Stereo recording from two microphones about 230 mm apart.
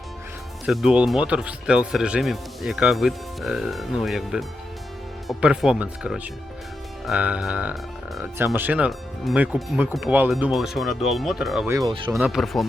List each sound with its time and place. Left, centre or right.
0.6 s speech: centre
11.9 s speech: right
12.2 s speech: centre